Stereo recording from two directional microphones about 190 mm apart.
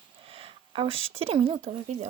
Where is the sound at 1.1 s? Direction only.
30° right (ahead or behind).